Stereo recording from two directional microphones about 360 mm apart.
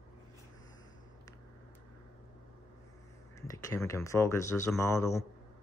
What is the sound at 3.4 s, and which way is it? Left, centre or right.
Speech, centre.